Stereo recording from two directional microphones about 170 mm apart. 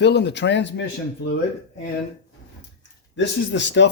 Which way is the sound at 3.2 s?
90° left.